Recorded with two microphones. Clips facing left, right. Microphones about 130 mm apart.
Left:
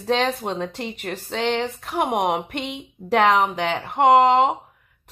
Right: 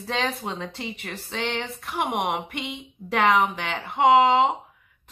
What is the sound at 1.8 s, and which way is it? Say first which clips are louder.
Speech: left 3 dB; 40° left (ahead or behind).